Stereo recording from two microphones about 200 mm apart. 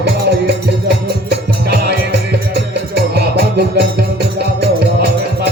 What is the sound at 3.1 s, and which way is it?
Music, 55° right (ahead or behind).